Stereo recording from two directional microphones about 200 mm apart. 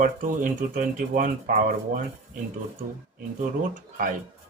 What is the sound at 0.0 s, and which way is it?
Speech, 40° right (ahead or behind).